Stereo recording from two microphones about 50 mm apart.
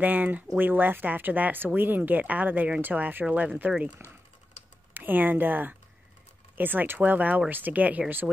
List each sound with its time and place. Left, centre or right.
0.0 s speech: right
4.9 s speech: right